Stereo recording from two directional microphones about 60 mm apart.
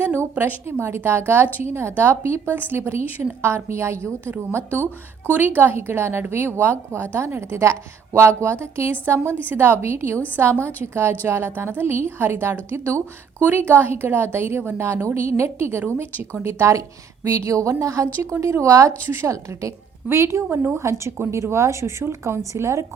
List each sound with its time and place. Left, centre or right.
0.0 s a woman's voice: right
13.4 s a woman's voice: right
19.0 s a woman's voice: right
19.3 s a woman's voice: right